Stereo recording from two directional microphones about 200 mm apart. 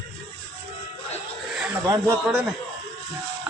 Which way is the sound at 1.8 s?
20° right (ahead or behind).